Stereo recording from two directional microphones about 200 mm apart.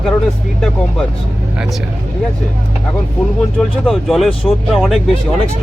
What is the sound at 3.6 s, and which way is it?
Speech, centre (ahead or behind).